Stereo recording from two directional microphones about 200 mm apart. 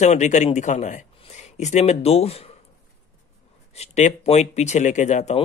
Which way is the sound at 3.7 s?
35° left (ahead or behind).